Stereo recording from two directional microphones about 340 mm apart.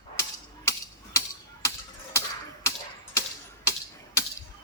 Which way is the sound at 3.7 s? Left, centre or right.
Centre.